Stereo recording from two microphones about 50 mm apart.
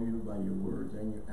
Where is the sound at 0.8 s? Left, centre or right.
Right.